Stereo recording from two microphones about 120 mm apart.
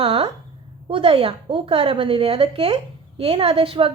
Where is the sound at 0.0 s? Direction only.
45° right (ahead or behind).